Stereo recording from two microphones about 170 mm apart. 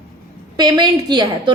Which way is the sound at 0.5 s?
25° right (ahead or behind).